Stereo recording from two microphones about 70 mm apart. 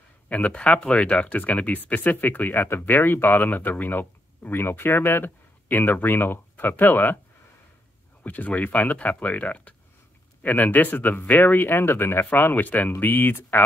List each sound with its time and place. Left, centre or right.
0.3 s speech: centre
8.2 s speech: left